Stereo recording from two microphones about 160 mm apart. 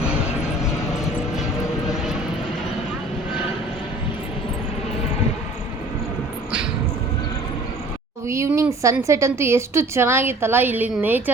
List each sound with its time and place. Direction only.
8.3 s a woman's voice: 20° right (ahead or behind)